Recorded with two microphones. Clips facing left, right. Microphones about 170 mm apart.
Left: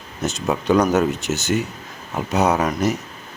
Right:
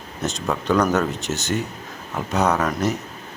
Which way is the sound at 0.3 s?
15° left (ahead or behind).